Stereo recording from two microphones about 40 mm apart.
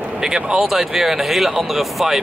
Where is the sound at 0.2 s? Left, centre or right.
Centre.